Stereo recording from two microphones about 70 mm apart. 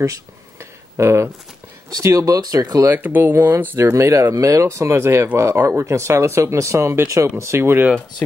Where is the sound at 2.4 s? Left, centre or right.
Right.